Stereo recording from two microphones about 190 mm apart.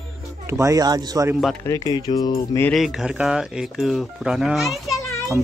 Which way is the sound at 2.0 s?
20° left (ahead or behind).